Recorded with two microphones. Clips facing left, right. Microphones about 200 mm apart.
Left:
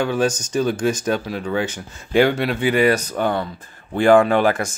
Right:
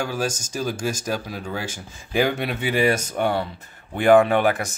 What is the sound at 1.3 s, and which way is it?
Speech, 10° right (ahead or behind).